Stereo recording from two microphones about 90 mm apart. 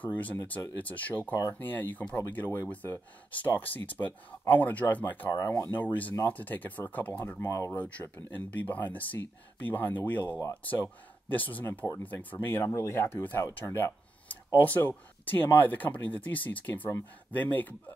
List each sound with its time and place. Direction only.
0.0 s speech: 20° left (ahead or behind)
7.4 s speech: 35° left (ahead or behind)
7.7 s speech: 15° left (ahead or behind)
13.6 s a sound: 25° left (ahead or behind)
14.6 s speech: 20° left (ahead or behind)